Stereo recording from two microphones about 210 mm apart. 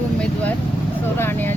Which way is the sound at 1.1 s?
10° left (ahead or behind).